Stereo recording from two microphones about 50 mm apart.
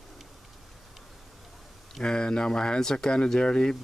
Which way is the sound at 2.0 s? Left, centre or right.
Centre.